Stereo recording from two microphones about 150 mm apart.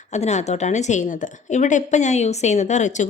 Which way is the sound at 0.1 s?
50° left (ahead or behind).